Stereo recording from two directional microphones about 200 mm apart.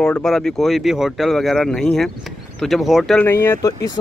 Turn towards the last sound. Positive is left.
turn(degrees=10)  # may be behind; listen again after turning